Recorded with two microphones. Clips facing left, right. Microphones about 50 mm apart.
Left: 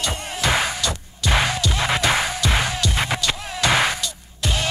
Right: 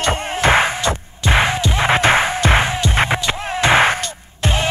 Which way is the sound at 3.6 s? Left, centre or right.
Right.